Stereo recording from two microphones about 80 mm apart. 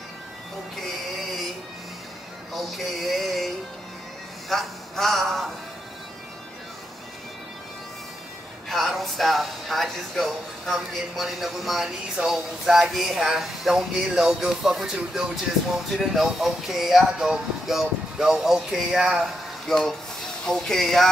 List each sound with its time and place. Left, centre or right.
2.5 s a sound: centre
4.5 s a man's voice: centre
8.6 s speech: centre